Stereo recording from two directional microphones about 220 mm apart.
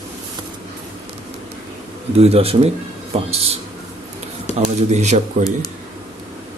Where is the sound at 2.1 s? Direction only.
25° right (ahead or behind).